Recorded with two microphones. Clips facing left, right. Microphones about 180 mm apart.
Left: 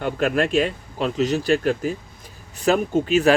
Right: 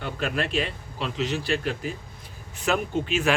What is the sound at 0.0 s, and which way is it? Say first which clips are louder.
Speech: left 7 dB; 50° left (ahead or behind).